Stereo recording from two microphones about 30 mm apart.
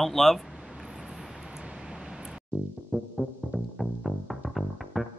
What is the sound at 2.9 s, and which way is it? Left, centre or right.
Music, right.